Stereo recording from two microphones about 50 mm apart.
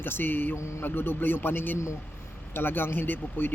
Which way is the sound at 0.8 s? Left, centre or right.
Left.